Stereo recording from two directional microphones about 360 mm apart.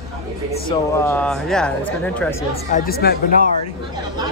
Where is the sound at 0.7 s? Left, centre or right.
Centre.